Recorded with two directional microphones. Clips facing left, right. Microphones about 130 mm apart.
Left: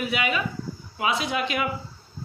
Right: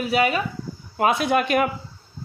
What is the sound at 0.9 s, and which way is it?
Speech, 50° right (ahead or behind).